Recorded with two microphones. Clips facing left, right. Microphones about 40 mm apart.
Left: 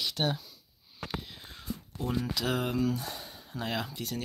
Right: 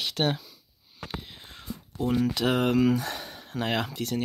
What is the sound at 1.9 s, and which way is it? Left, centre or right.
Speech, right.